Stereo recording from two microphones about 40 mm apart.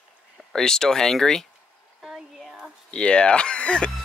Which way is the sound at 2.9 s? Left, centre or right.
Left.